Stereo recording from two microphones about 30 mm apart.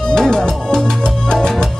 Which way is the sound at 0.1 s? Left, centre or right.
Left.